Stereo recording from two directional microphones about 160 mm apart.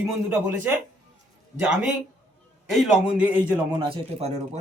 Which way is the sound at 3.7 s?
35° right (ahead or behind).